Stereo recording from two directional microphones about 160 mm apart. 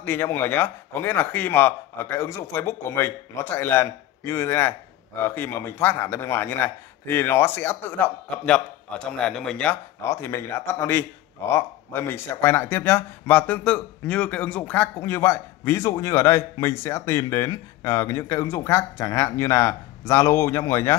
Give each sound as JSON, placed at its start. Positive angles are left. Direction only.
{"t": 0.0, "sound": "speech", "side_deg": 15}
{"t": 10.0, "sound": "speech", "side_deg": 15}